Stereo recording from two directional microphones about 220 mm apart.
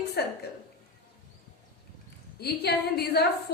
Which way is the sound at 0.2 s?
45° left (ahead or behind).